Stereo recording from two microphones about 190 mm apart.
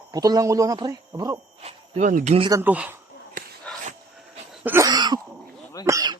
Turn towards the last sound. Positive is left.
turn(degrees=-15)  # may be behind; listen again after turning